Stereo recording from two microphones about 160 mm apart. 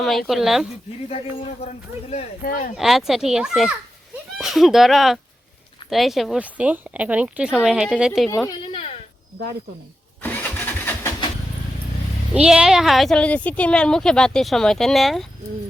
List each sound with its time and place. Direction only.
0.0 s speech: centre (ahead or behind)
1.6 s speech: 40° left (ahead or behind)
2.4 s speech: 60° left (ahead or behind)
2.7 s speech: centre (ahead or behind)
10.2 s engine starting: 10° left (ahead or behind)
12.3 s speech: 5° right (ahead or behind)